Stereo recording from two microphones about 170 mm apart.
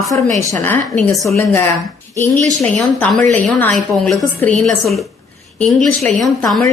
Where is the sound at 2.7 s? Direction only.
5° left (ahead or behind).